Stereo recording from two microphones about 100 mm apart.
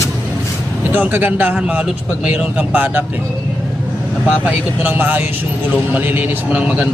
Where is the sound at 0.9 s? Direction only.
20° right (ahead or behind).